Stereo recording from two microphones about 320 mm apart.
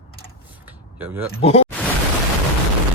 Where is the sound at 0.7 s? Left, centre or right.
Centre.